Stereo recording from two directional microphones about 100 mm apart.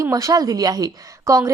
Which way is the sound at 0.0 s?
35° right (ahead or behind).